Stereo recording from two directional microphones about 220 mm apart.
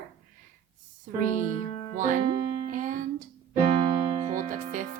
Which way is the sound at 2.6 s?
35° right (ahead or behind).